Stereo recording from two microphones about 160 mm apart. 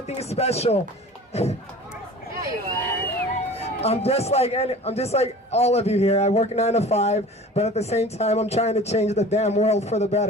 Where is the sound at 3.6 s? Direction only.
40° left (ahead or behind).